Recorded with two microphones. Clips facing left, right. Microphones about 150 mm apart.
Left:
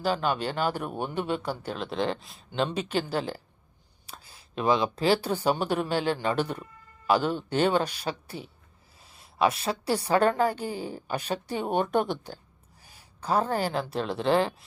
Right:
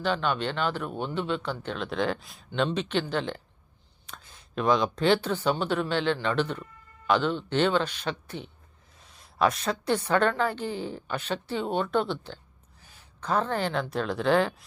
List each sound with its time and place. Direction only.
0.1 s a woman's voice: 35° left (ahead or behind)
0.6 s speech: 10° left (ahead or behind)
1.8 s speech: centre (ahead or behind)
2.5 s speech: 10° left (ahead or behind)
9.0 s a sound: 5° left (ahead or behind)
10.2 s a woman's voice: 40° left (ahead or behind)
10.5 s speech: 10° left (ahead or behind)
12.8 s a sound: 10° left (ahead or behind)
13.2 s speech: 10° left (ahead or behind)